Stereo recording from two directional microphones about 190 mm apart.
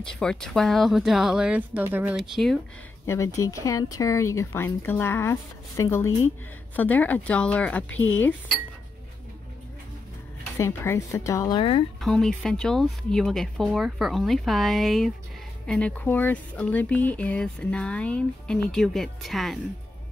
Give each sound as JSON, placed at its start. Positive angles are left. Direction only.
{"t": 0.0, "sound": "speech", "side_deg": 5}
{"t": 3.1, "sound": "speech", "side_deg": 15}
{"t": 10.6, "sound": "speech", "side_deg": 15}
{"t": 12.0, "sound": "speech", "side_deg": 0}